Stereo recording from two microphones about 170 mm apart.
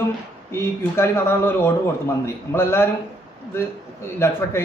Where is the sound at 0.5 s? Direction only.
15° left (ahead or behind).